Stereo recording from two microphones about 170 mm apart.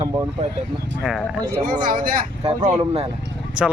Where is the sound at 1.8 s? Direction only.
55° right (ahead or behind).